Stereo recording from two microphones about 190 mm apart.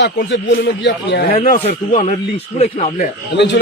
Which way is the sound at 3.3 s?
70° left (ahead or behind).